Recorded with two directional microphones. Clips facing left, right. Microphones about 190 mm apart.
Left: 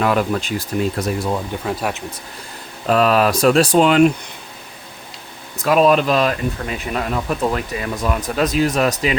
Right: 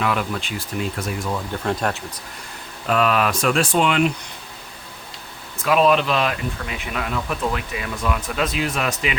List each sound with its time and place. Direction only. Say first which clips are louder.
0.0 s speech: left 5 dB; 40° left (ahead or behind)
1.6 s speech: right 3 dB; 5° left (ahead or behind)
2.8 s speech: left 4 dB; 35° left (ahead or behind)
5.6 s speech: left 3 dB; 40° left (ahead or behind)